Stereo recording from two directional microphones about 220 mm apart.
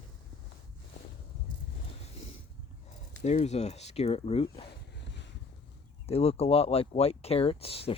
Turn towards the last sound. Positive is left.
turn(degrees=25)  # may be behind; listen again after turning